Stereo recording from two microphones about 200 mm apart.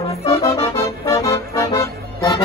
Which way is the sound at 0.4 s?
15° left (ahead or behind).